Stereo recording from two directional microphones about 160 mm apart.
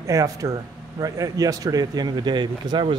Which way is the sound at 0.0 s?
20° right (ahead or behind).